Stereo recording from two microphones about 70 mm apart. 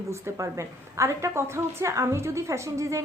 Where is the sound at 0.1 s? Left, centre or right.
Right.